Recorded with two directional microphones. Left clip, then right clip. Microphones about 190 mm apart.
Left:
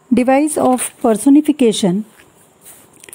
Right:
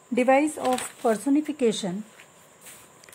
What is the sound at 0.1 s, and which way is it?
Speech, 45° left (ahead or behind).